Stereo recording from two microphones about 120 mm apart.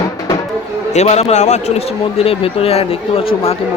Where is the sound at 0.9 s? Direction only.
70° left (ahead or behind).